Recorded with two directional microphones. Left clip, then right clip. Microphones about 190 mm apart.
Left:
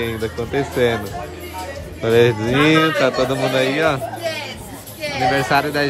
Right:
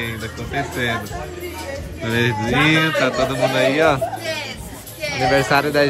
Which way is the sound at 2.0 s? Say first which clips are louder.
Left 6 dB; 30° left (ahead or behind).